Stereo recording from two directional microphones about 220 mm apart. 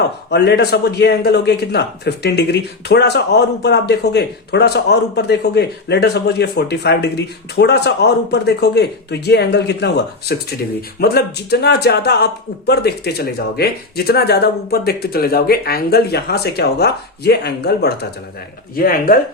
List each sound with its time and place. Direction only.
0.3 s a man's voice: 50° left (ahead or behind)